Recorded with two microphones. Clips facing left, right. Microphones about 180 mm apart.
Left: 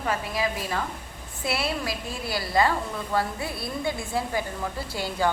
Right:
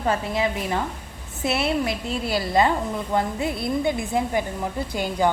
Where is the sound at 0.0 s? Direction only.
25° right (ahead or behind).